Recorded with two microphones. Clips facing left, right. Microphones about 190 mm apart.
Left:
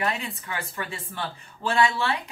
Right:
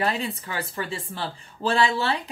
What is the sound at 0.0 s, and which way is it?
Speech, 35° right (ahead or behind).